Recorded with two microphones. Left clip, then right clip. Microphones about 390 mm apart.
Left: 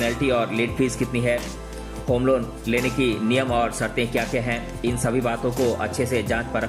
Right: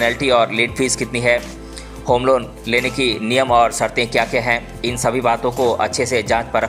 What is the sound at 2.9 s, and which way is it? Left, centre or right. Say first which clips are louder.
Speech: right 4 dB; right.